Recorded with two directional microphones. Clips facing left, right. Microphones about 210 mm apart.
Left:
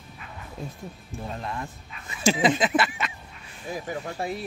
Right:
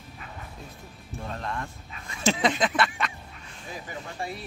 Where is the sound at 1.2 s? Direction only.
10° left (ahead or behind).